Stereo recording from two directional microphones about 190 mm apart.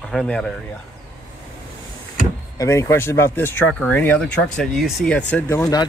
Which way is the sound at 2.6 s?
15° left (ahead or behind).